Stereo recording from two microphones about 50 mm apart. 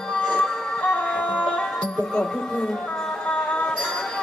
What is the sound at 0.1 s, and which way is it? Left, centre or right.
Music, left.